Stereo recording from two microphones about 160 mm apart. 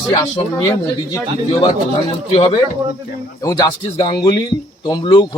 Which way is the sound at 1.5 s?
35° left (ahead or behind).